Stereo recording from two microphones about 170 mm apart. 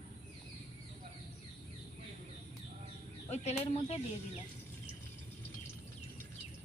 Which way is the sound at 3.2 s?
40° left (ahead or behind).